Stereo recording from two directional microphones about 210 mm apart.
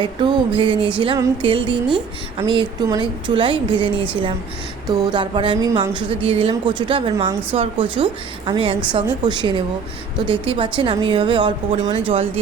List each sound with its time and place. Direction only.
0.0 s a woman's voice: 20° right (ahead or behind)